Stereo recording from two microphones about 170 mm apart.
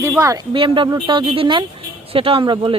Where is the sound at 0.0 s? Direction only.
15° right (ahead or behind).